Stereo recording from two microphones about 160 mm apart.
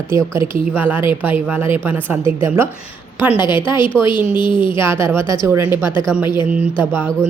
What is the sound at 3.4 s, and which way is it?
A woman's voice, 30° left (ahead or behind).